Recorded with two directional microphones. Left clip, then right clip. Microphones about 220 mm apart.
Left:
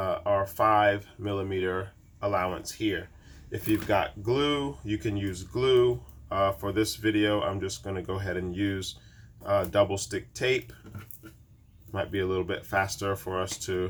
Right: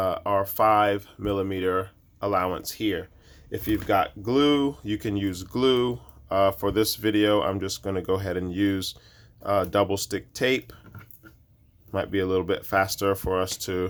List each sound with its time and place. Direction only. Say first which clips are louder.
0.0 s speech: right 2 dB; 55° right (ahead or behind)
11.9 s speech: right 4 dB; 55° right (ahead or behind)